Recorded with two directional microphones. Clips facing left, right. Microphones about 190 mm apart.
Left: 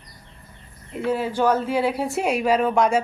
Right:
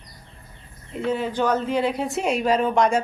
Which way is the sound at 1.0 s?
5° left (ahead or behind).